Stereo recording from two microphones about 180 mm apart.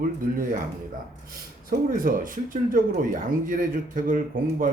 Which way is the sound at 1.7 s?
50° right (ahead or behind).